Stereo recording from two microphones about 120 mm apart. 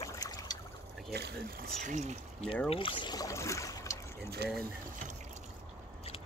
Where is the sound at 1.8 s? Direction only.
80° right.